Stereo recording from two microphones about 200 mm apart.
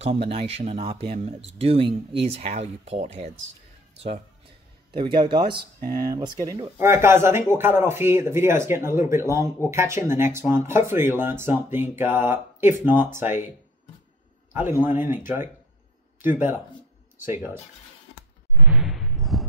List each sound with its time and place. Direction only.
0.0 s speech: 30° right (ahead or behind)
4.9 s speech: 25° right (ahead or behind)
14.5 s speech: 10° right (ahead or behind)
18.7 s whoosh: centre (ahead or behind)